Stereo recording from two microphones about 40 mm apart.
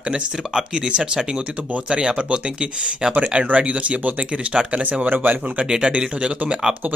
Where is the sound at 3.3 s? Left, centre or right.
Right.